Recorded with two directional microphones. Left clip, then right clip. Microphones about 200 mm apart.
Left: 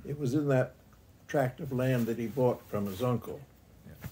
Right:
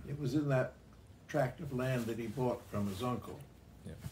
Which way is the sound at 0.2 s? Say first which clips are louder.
Left 5 dB; 65° left (ahead or behind).